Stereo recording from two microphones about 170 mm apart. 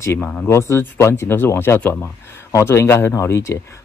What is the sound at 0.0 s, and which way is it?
Speech, 15° left (ahead or behind).